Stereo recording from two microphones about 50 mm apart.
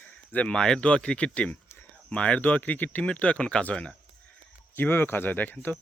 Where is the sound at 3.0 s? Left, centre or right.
Left.